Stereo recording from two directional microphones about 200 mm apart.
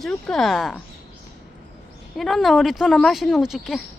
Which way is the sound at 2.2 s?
Centre (ahead or behind).